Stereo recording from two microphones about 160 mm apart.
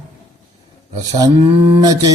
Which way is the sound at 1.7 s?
25° right (ahead or behind).